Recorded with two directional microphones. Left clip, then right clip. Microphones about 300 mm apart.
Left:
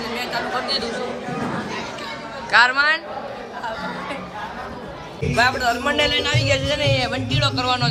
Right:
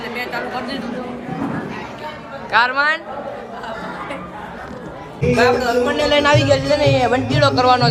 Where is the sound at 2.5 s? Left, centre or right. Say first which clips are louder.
Even; centre.